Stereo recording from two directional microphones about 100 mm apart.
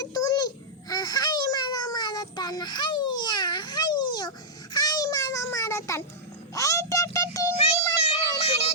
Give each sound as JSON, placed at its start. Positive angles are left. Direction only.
{"t": 0.0, "sound": "babbling", "side_deg": 35}
{"t": 6.5, "sound": "a sound", "side_deg": 35}
{"t": 8.0, "sound": "child singing", "side_deg": 90}